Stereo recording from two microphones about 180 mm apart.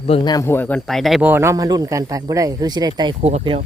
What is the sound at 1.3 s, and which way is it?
Speech, 15° right (ahead or behind).